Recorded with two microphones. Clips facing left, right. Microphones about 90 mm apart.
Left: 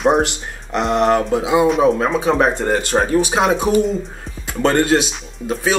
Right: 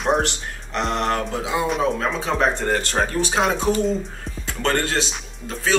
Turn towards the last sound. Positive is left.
turn(degrees=15)  # may be behind; listen again after turning